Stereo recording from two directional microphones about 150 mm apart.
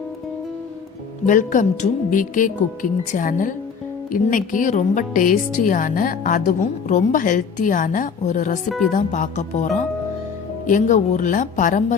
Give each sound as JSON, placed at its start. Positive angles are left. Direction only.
{"t": 1.3, "sound": "a woman's voice", "side_deg": 60}